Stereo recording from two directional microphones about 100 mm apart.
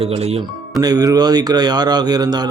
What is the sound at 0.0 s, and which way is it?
Speech, 80° right.